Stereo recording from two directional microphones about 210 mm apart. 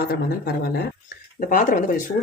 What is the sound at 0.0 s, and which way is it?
Speech, 45° left (ahead or behind).